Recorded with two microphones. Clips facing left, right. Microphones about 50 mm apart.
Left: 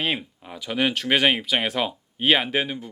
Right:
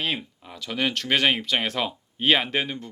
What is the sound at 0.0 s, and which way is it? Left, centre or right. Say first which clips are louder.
Speech: left 2 dB; centre.